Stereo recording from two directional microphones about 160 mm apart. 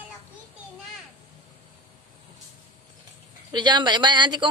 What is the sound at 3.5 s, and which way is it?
Speech, 30° right (ahead or behind).